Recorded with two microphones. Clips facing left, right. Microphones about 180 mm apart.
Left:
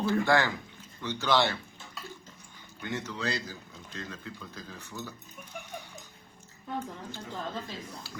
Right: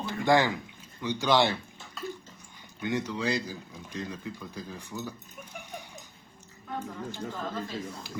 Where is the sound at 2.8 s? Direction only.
15° right (ahead or behind).